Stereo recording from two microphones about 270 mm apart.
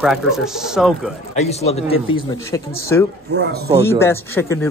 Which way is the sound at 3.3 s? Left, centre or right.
Right.